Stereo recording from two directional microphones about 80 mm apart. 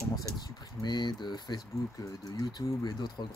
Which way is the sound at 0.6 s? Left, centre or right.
Left.